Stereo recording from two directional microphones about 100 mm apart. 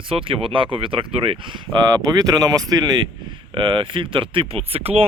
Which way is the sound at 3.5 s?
60° right (ahead or behind).